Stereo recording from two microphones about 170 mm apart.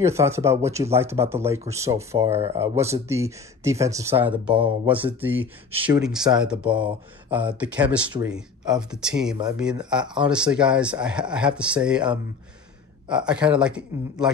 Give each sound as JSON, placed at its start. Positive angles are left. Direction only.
{"t": 0.0, "sound": "speech", "side_deg": -15}
{"t": 6.1, "sound": "speech", "side_deg": -25}
{"t": 6.4, "sound": "speech", "side_deg": -5}